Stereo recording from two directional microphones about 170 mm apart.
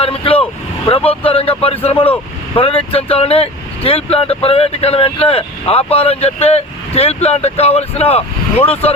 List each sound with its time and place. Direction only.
0.0 s vehicle: 35° left (ahead or behind)
0.9 s speech: 30° left (ahead or behind)